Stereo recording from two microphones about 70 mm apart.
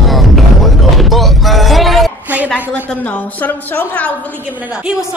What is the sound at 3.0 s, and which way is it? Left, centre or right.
Speech, left.